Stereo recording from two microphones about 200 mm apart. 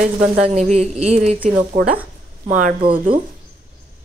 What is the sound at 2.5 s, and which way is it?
Speech, 40° right (ahead or behind).